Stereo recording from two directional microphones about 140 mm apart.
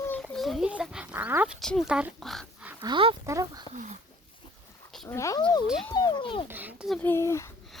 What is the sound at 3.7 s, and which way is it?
Speech, 60° right (ahead or behind).